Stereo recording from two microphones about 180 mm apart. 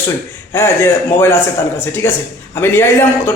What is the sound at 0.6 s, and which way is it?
A man's voice, 15° left (ahead or behind).